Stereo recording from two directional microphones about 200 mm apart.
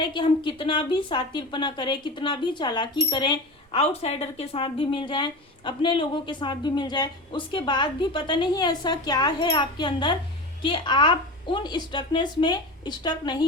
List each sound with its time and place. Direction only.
0.0 s a woman's voice: 25° left (ahead or behind)